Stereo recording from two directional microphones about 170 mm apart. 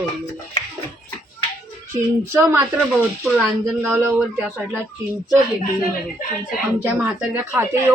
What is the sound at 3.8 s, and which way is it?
Speech, 10° right (ahead or behind).